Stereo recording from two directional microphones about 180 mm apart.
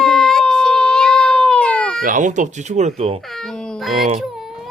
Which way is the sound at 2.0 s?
45° right (ahead or behind).